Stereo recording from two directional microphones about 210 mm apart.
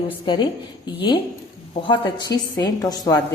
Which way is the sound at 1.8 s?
20° left (ahead or behind).